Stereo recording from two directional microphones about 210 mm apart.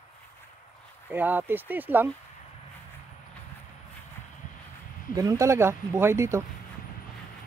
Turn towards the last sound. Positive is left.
turn(degrees=-15)  # may be behind; listen again after turning